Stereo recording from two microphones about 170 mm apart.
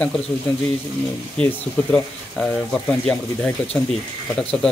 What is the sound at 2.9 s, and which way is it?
Speech, 5° left (ahead or behind).